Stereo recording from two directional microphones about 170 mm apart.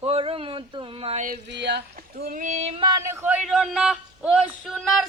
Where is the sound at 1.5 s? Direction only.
85° right; by 2.9 s 30° right (ahead or behind).